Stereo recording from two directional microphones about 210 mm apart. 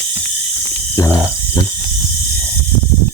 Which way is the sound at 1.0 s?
15° left (ahead or behind).